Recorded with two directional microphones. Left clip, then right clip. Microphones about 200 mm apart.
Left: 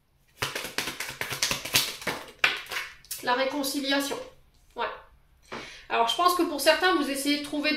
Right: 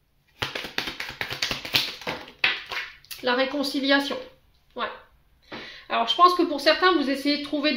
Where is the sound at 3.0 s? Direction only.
50° right (ahead or behind).